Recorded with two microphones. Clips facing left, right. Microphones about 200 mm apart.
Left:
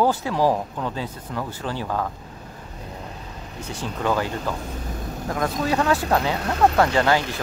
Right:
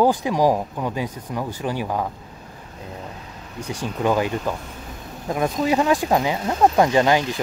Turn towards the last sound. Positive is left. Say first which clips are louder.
# right 2 dB
turn(degrees=-15)  # may be behind; listen again after turning